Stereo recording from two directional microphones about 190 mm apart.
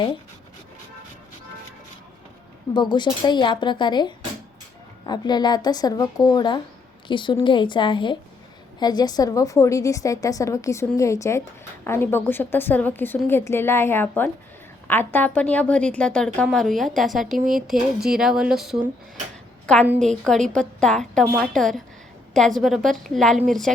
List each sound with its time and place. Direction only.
2.7 s a woman's voice: 25° left (ahead or behind); by 17.3 s centre (ahead or behind)
17.3 s speech: 45° right (ahead or behind)
17.7 s a woman's voice: centre (ahead or behind)